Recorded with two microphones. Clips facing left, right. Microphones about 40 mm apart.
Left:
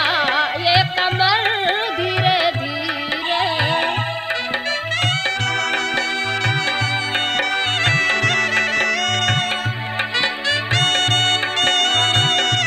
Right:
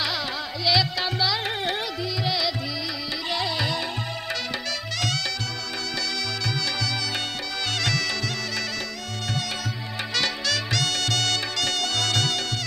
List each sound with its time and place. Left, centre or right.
0.0 s music: left
7.8 s music: left
10.2 s music: left